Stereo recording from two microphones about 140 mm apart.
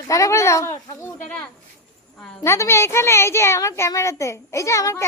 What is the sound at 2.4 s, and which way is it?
Speech, 20° left (ahead or behind).